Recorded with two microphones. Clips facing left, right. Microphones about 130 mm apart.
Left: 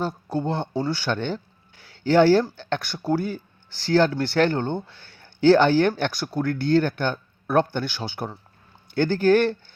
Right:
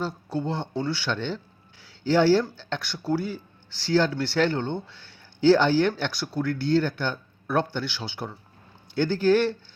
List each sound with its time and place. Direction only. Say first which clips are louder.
0.0 s speech: left 3 dB; 50° left (ahead or behind)